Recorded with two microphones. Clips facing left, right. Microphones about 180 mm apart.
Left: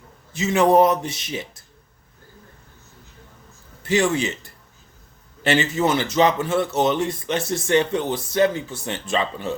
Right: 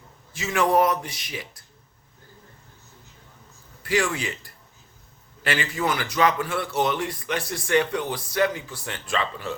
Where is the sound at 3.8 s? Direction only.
25° left (ahead or behind).